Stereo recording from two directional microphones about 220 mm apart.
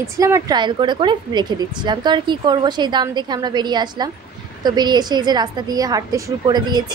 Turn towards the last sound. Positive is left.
turn(degrees=-20)  # may be behind; listen again after turning